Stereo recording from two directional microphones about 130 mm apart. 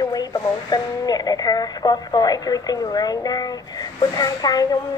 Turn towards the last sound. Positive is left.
turn(degrees=30)  # may be behind; listen again after turning